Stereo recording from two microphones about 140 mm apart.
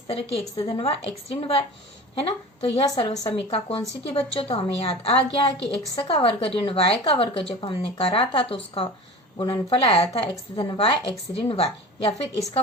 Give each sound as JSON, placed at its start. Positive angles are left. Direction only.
{"t": 0.1, "sound": "a woman's voice", "side_deg": 45}